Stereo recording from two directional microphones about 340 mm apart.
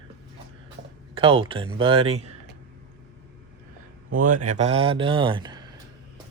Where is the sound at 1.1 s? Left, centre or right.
Centre.